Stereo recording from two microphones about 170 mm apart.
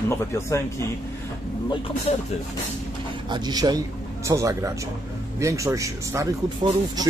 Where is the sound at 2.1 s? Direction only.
40° left (ahead or behind).